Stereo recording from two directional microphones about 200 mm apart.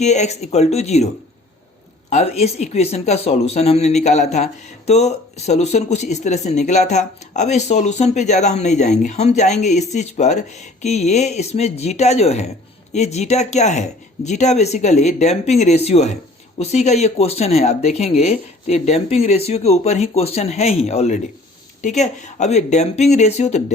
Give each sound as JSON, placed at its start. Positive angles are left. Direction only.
{"t": 0.0, "sound": "speech", "side_deg": 35}